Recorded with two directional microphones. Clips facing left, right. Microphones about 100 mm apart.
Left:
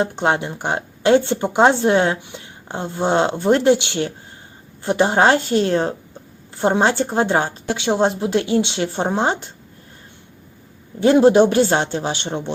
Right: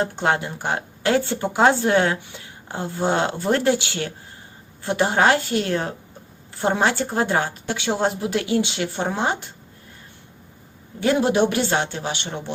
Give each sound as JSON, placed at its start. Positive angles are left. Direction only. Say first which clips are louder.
{"t": 0.0, "sound": "a woman's voice", "louder": "left 3 dB", "side_deg": 20}
{"t": 11.0, "sound": "speech", "louder": "left 7 dB", "side_deg": 30}